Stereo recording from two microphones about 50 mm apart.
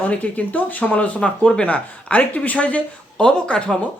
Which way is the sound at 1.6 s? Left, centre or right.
Left.